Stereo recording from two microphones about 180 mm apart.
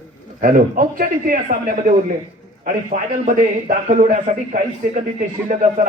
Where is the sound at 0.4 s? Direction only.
50° right (ahead or behind).